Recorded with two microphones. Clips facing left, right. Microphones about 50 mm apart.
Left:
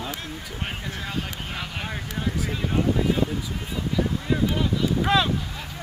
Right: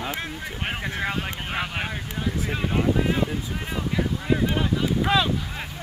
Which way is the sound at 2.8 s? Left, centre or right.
Right.